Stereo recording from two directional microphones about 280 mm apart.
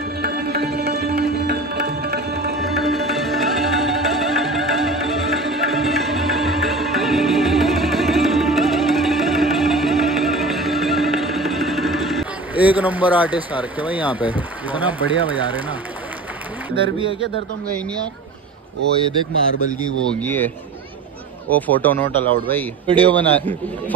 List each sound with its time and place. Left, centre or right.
0.2 s music: right
2.6 s music: centre
20.2 s a man's voice: centre